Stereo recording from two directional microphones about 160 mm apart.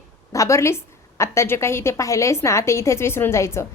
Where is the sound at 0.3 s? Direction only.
20° left (ahead or behind).